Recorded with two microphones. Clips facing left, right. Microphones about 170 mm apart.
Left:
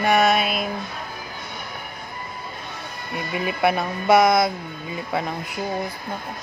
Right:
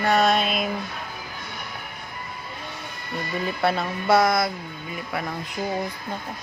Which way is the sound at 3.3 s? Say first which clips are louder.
Left 3 dB; 15° left (ahead or behind).